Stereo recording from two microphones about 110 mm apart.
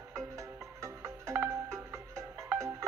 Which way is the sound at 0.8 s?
25° right (ahead or behind).